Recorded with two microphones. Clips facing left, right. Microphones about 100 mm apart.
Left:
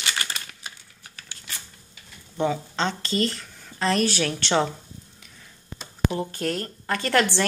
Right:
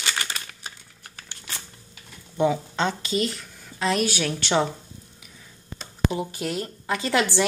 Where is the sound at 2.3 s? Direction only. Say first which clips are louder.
Right 2 dB; 10° right (ahead or behind).